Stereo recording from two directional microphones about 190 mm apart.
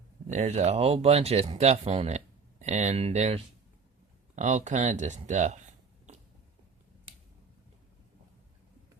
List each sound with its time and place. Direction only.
0.3 s speech: 35° right (ahead or behind)